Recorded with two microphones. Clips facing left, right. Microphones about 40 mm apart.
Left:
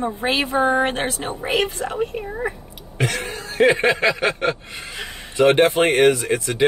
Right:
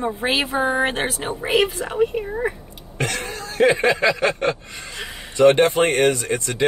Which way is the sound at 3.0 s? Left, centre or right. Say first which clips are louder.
Left 1 dB; centre.